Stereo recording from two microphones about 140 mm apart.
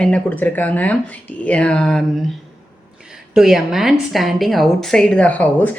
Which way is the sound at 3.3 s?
Centre (ahead or behind).